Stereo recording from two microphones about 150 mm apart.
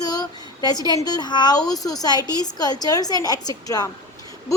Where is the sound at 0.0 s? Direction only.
25° left (ahead or behind).